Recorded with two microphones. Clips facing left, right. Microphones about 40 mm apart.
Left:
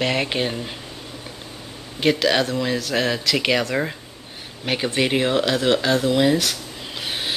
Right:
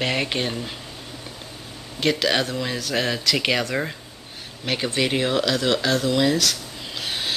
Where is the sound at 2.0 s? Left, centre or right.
Centre.